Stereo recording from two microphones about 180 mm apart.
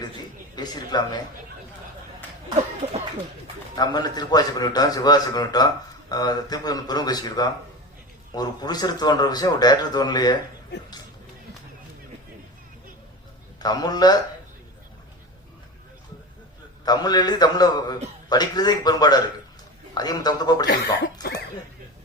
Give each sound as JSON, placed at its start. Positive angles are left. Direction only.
{"t": 0.5, "sound": "a man's voice", "side_deg": 20}
{"t": 3.8, "sound": "a man's voice", "side_deg": 20}
{"t": 13.6, "sound": "a man's voice", "side_deg": 20}
{"t": 16.8, "sound": "a man's voice", "side_deg": 20}
{"t": 21.2, "sound": "speech", "side_deg": 60}